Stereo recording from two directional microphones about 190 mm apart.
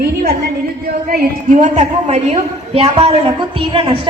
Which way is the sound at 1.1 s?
40° right (ahead or behind).